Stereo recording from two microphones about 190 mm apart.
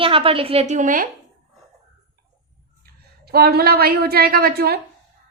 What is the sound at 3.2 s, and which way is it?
A woman's voice, 55° right (ahead or behind).